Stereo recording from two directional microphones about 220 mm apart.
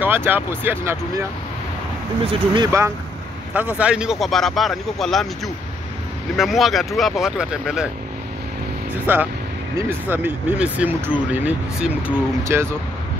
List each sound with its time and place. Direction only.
0.0 s speech: 10° right (ahead or behind)
2.2 s speech: 25° right (ahead or behind); by 5.3 s centre (ahead or behind)
6.3 s speech: centre (ahead or behind)
9.0 s speech: 10° right (ahead or behind)